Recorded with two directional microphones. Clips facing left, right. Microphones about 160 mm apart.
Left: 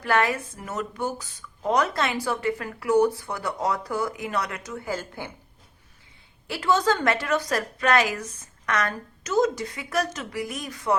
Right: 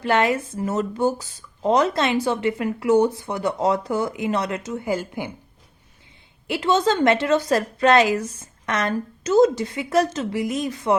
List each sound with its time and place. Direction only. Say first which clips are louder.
0.0 s speech: right 4 dB; 20° right (ahead or behind)
6.5 s speech: right 3 dB; 20° right (ahead or behind)